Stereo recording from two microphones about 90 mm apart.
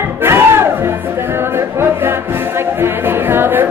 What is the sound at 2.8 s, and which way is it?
Music, 25° right (ahead or behind).